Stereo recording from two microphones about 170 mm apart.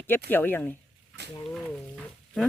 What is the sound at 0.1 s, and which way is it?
Speech, 10° left (ahead or behind).